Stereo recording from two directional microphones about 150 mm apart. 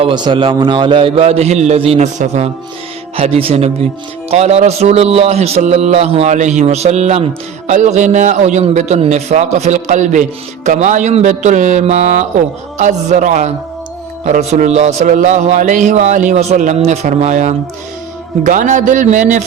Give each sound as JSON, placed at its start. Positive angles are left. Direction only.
{"t": 0.0, "sound": "a man's voice", "side_deg": -30}